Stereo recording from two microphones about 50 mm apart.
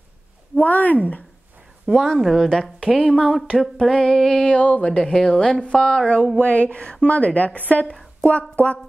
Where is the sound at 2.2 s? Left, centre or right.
Centre.